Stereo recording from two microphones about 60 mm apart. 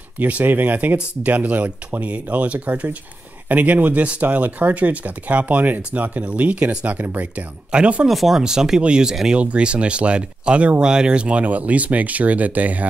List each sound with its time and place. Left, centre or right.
0.2 s speech: right
8.1 s speech: centre; by 12.8 s right